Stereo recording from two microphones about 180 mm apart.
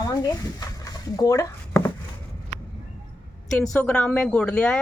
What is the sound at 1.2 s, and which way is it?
Chopping, 15° left (ahead or behind).